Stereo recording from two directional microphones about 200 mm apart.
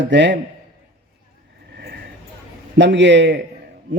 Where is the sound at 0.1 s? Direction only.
60° right (ahead or behind).